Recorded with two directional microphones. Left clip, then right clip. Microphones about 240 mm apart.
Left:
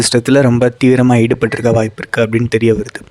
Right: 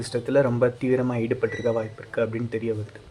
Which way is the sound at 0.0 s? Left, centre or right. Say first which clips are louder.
Left 11 dB; left.